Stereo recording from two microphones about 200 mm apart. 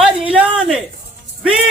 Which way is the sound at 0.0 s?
5° right (ahead or behind).